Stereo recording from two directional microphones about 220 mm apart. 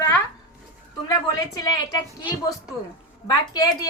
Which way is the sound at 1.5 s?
15° left (ahead or behind).